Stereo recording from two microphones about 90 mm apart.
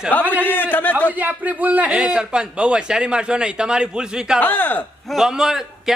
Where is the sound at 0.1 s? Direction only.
20° left (ahead or behind).